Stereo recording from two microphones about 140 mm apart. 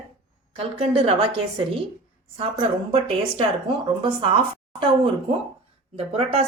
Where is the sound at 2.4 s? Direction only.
40° right (ahead or behind).